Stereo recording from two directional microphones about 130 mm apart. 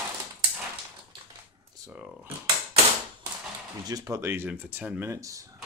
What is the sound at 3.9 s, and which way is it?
Speech, 25° right (ahead or behind).